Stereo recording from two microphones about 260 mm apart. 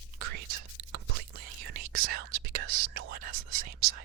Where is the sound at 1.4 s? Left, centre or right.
Right.